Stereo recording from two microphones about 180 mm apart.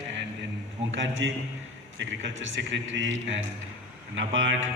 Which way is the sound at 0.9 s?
90° right.